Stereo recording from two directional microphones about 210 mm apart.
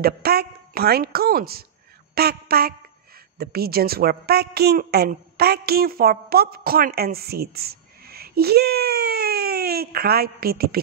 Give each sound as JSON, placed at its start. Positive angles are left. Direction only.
{"t": 0.0, "sound": "a man's voice", "side_deg": -45}